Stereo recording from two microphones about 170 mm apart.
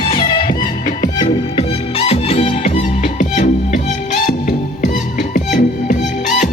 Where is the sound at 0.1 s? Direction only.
30° left (ahead or behind).